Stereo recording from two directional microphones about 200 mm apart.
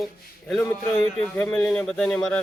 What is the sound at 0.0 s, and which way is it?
A man's voice, centre (ahead or behind).